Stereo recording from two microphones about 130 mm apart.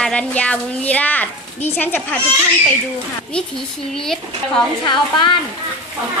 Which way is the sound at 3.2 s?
5° left (ahead or behind).